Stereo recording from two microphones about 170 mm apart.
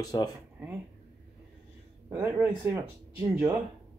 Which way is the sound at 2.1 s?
15° right (ahead or behind).